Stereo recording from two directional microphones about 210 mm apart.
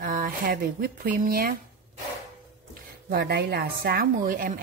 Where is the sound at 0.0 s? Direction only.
40° right (ahead or behind).